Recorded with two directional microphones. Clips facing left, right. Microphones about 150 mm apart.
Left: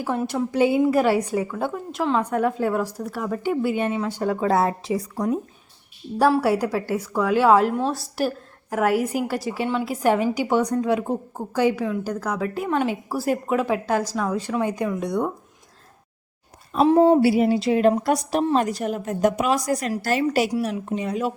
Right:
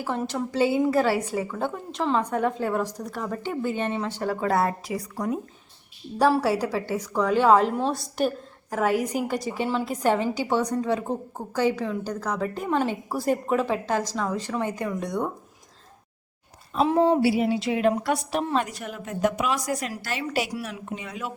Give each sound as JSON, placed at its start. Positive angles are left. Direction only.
{"t": 0.1, "sound": "a woman's voice", "side_deg": 5}
{"t": 4.8, "sound": "a woman's voice", "side_deg": 25}
{"t": 6.1, "sound": "a woman's voice", "side_deg": 5}
{"t": 16.8, "sound": "a woman's voice", "side_deg": 35}